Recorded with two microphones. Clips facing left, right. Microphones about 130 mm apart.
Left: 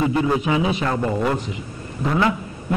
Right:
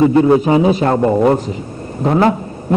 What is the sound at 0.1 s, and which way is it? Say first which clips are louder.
A man's voice: right 9 dB; 35° right (ahead or behind).